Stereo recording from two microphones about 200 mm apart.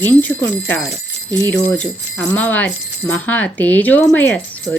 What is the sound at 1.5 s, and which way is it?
Speech, 5° left (ahead or behind).